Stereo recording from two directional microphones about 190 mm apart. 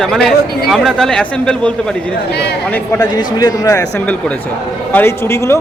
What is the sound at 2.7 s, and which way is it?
Speech, 15° left (ahead or behind).